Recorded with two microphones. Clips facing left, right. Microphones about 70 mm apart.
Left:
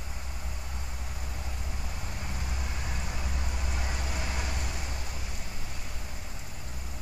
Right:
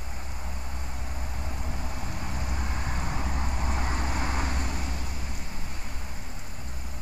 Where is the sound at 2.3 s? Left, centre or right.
Right.